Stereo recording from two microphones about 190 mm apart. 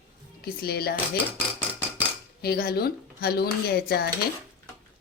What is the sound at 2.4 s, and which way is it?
Speech, 55° left (ahead or behind).